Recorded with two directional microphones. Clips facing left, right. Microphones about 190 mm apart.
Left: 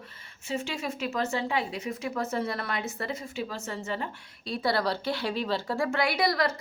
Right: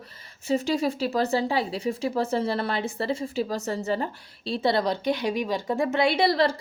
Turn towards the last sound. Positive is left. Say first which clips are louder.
# right 5 dB
turn(degrees=-30)  # may be behind; listen again after turning